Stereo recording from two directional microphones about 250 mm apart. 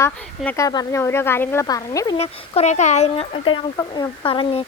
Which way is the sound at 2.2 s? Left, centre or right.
Left.